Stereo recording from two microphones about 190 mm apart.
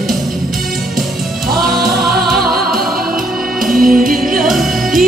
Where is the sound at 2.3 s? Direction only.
55° right (ahead or behind).